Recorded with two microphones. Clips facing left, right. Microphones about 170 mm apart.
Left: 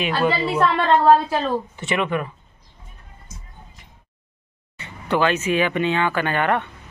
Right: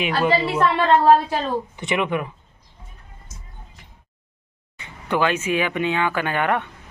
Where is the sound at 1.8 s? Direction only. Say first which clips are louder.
Even; 15° right (ahead or behind).